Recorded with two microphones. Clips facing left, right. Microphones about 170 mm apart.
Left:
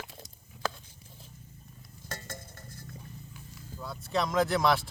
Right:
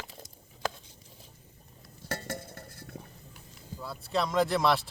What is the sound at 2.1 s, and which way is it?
Dishes, 65° right (ahead or behind).